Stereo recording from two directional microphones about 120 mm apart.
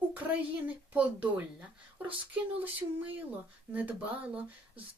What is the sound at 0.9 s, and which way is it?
Speech, 10° right (ahead or behind).